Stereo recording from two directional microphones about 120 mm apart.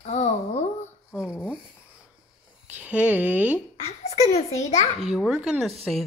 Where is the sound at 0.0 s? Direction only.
70° left (ahead or behind).